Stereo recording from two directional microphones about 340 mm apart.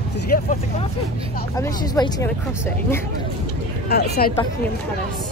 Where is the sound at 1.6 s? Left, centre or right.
Centre.